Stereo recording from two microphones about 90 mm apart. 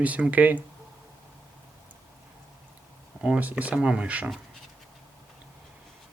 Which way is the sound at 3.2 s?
15° right (ahead or behind).